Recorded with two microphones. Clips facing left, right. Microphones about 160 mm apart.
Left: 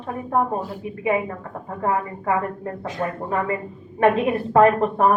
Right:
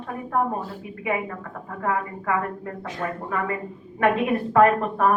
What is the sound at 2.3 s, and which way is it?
Speech, 30° left (ahead or behind).